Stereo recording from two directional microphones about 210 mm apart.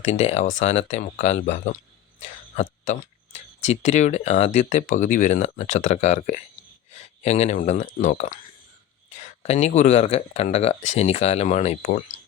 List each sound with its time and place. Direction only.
0.0 s speech: 30° left (ahead or behind)